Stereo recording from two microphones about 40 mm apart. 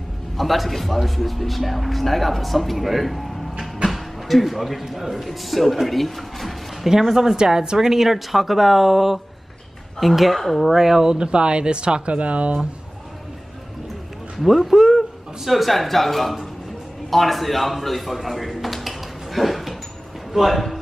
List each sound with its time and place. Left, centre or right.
0.4 s speech: centre
3.8 s a sound: centre
4.9 s speech: centre
6.9 s speech: centre; by 12.6 s right
14.3 s a man's voice: centre